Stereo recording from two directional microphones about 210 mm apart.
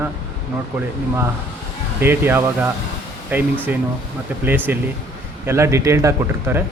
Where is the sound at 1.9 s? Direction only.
10° right (ahead or behind).